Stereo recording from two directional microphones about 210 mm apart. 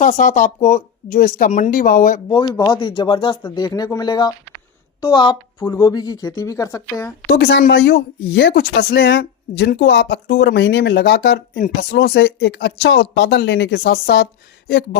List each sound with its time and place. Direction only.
0.0 s speech: 40° left (ahead or behind)
2.3 s speech: 20° left (ahead or behind)
7.3 s a woman's voice: 50° left (ahead or behind)